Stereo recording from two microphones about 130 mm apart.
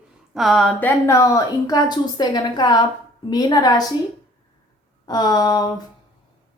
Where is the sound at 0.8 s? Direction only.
15° left (ahead or behind).